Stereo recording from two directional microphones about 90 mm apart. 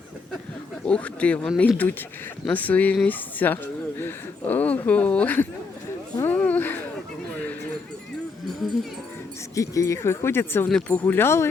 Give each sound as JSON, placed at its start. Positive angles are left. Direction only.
{"t": 0.9, "sound": "speech", "side_deg": 15}
{"t": 6.2, "sound": "a sound", "side_deg": 20}
{"t": 9.6, "sound": "speech", "side_deg": 35}